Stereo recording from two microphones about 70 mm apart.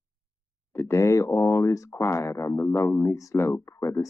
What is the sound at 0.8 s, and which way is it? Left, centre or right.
Speech, left.